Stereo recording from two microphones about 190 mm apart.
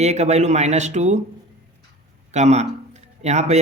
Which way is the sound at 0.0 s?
35° right (ahead or behind).